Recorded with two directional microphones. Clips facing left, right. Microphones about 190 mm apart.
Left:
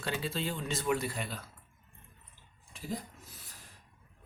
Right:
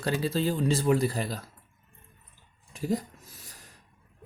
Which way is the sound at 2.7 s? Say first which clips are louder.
Right 10 dB; 40° right (ahead or behind).